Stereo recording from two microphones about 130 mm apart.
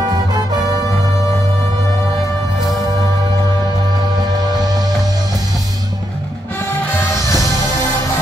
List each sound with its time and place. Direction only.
4.6 s music: 30° right (ahead or behind)
6.6 s music: 20° left (ahead or behind)